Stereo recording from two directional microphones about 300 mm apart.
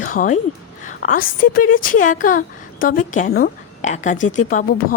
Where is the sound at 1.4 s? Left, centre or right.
Left.